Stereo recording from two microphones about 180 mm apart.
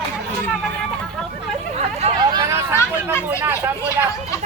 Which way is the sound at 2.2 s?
25° right (ahead or behind).